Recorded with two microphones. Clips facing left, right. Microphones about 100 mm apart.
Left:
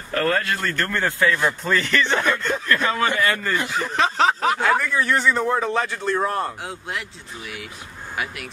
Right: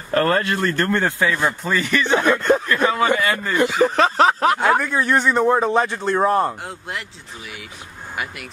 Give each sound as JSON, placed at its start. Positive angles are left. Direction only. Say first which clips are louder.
{"t": 0.1, "sound": "speech", "louder": "right 4 dB", "side_deg": -35}
{"t": 0.9, "sound": "a man's voice", "louder": "right 1 dB", "side_deg": -20}
{"t": 1.3, "sound": "speech", "louder": "even", "side_deg": -10}
{"t": 2.4, "sound": "snicker", "louder": "right 8 dB", "side_deg": -50}
{"t": 3.2, "sound": "speech", "louder": "right 2 dB", "side_deg": -15}
{"t": 3.8, "sound": "snicker", "louder": "right 4 dB", "side_deg": -45}
{"t": 4.6, "sound": "a man's voice", "louder": "right 2 dB", "side_deg": -20}
{"t": 6.6, "sound": "speech", "louder": "even", "side_deg": 0}